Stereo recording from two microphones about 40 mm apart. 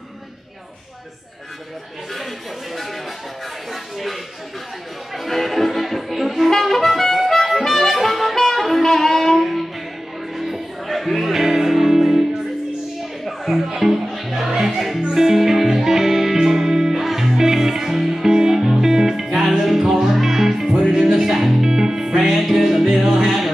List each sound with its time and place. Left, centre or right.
5.1 s music: centre
13.7 s music: centre
20.7 s music: centre